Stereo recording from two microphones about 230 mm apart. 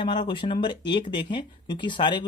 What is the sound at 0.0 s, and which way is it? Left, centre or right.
Speech, left.